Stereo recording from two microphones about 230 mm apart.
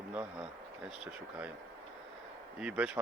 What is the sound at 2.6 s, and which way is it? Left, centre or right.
Speech, centre.